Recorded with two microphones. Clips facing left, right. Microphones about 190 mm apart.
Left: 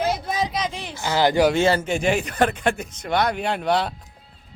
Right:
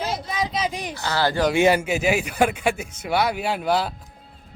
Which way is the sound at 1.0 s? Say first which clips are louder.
Left 4 dB; 15° left (ahead or behind).